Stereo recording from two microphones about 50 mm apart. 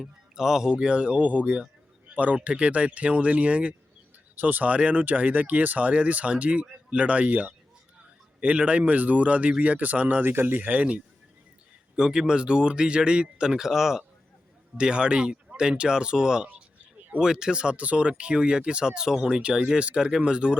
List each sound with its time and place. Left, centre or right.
0.0 s speech: centre
4.4 s speech: right
10.2 s speech: right
11.9 s speech: centre
14.8 s speech: centre